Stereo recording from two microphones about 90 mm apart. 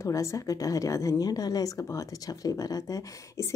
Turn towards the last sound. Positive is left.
turn(degrees=40)  # may be behind; listen again after turning